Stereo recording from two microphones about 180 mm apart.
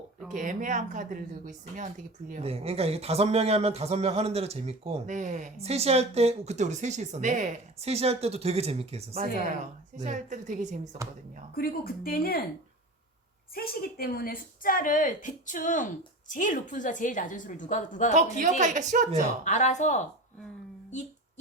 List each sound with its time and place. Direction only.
0.3 s speech: 45° right (ahead or behind)
2.4 s speech: 35° right (ahead or behind)
9.1 s speech: 50° right (ahead or behind)
11.5 s speech: 55° left (ahead or behind)
13.5 s a woman's voice: 55° left (ahead or behind)
18.1 s speech: 45° right (ahead or behind)
19.5 s speech: 40° left (ahead or behind)